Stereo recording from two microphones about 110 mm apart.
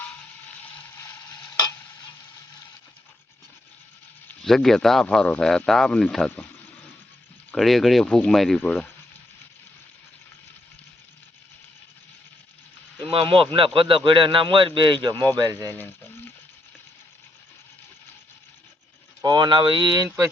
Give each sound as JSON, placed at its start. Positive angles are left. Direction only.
{"t": 4.4, "sound": "speech", "side_deg": 5}
{"t": 7.5, "sound": "speech", "side_deg": 0}
{"t": 13.0, "sound": "speech", "side_deg": -55}
{"t": 15.1, "sound": "speech", "side_deg": 15}
{"t": 15.7, "sound": "a sound", "side_deg": 15}
{"t": 19.2, "sound": "speech", "side_deg": -40}